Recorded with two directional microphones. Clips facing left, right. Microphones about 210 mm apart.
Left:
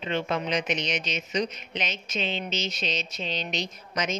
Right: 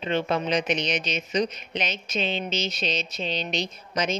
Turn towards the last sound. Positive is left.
turn(degrees=-30)  # may be behind; listen again after turning